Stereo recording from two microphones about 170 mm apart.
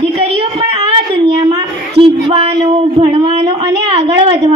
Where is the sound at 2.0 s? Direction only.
35° right (ahead or behind).